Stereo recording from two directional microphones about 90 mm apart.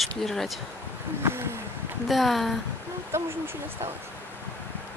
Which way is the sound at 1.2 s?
30° right (ahead or behind).